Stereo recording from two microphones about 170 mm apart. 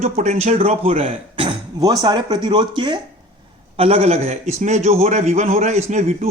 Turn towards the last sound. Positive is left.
turn(degrees=-40)  # may be behind; listen again after turning